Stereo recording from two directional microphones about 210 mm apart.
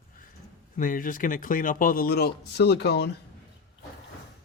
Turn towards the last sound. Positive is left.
turn(degrees=50)  # may be behind; listen again after turning